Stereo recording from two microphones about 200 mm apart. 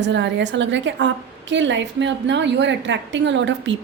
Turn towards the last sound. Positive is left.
turn(degrees=-65)  # may be behind; listen again after turning